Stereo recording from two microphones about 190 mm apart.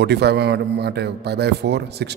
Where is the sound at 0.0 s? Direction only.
60° right (ahead or behind).